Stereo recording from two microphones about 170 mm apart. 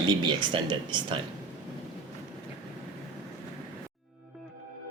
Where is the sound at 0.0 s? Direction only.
25° right (ahead or behind).